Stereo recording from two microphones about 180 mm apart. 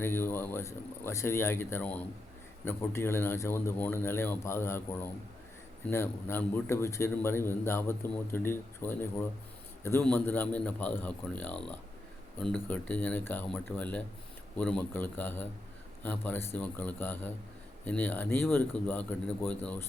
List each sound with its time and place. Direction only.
0.0 s a man's voice: 10° left (ahead or behind)